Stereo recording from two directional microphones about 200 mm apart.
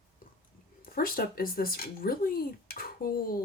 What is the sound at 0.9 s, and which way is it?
Speech, 45° left (ahead or behind).